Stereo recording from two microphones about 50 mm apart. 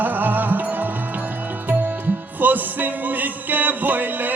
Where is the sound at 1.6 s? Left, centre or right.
Right.